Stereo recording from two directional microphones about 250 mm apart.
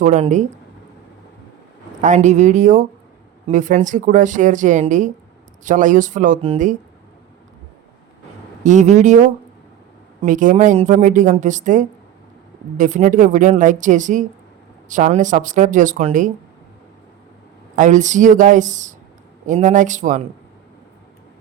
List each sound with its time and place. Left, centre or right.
0.0 s speech: right
2.0 s speech: right
8.6 s speech: right
10.2 s speech: right
17.7 s speech: right